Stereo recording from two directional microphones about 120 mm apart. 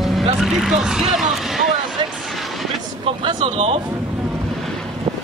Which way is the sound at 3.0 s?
55° right (ahead or behind).